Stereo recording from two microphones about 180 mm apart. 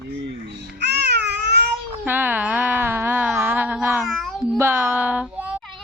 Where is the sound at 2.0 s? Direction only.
10° right (ahead or behind).